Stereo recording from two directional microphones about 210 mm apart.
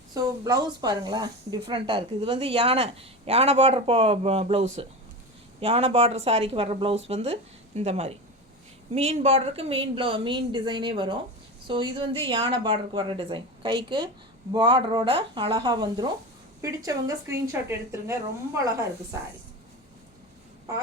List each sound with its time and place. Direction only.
0.1 s a woman's voice: 20° right (ahead or behind)